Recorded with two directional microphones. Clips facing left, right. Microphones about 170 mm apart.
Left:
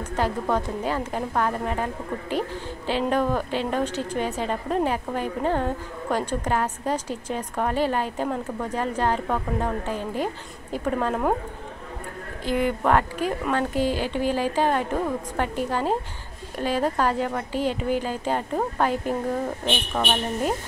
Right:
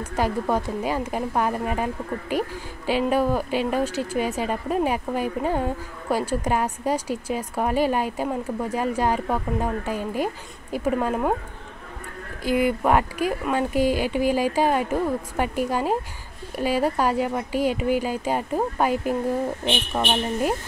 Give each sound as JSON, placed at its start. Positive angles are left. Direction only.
{"t": 0.1, "sound": "a woman's voice", "side_deg": -10}
{"t": 12.4, "sound": "a woman's voice", "side_deg": -10}